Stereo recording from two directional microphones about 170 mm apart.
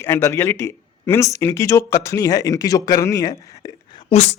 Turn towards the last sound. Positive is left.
turn(degrees=40)  # may be behind; listen again after turning